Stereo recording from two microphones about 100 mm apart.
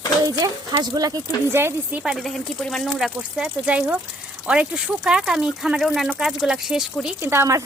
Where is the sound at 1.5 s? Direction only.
25° right (ahead or behind).